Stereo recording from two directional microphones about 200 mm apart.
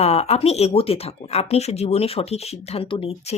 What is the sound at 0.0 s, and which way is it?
Speech, 30° left (ahead or behind).